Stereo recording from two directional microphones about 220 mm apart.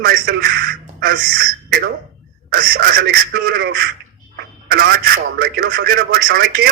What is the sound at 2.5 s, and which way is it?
Speech, 40° right (ahead or behind).